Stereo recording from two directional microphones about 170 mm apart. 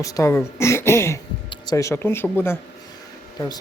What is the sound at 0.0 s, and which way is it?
Speech, 20° left (ahead or behind).